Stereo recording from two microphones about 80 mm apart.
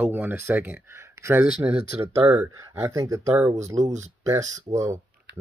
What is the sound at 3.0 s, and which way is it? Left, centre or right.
Speech, right.